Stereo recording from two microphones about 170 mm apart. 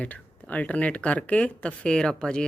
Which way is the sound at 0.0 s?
10° left (ahead or behind).